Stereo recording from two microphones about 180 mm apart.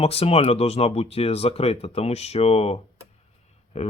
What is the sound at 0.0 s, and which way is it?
Speech, 35° left (ahead or behind).